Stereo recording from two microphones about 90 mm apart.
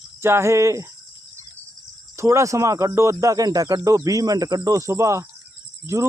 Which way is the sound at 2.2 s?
30° right (ahead or behind).